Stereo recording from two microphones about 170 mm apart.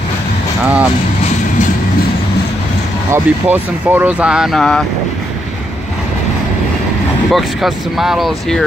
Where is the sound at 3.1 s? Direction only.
10° right (ahead or behind).